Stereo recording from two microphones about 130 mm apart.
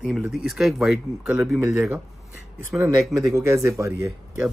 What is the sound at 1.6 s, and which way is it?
Speech, 20° right (ahead or behind).